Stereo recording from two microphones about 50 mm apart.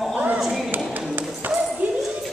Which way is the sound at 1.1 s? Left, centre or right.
Right.